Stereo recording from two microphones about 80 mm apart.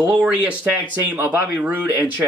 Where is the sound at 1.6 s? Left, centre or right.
Centre.